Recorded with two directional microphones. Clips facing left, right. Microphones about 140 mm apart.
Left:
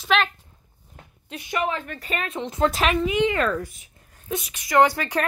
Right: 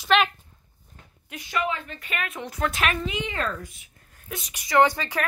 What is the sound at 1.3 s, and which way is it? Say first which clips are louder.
A woman's voice: left 2 dB; 30° left (ahead or behind).